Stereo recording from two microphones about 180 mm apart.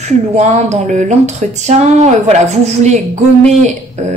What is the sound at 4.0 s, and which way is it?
Speech, 40° right (ahead or behind).